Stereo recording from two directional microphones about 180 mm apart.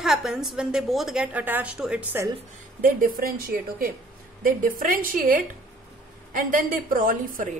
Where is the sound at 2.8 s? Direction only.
55° right (ahead or behind).